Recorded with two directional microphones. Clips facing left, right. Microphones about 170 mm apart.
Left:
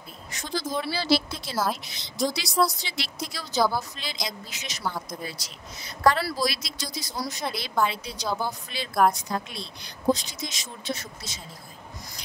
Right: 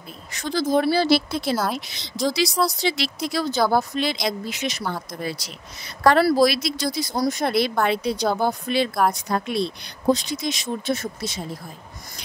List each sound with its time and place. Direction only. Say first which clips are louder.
0.3 s speech: right 9 dB; 75° right (ahead or behind)
1.9 s a woman's voice: right 3 dB; 85° right; by 11.4 s 55° right (ahead or behind)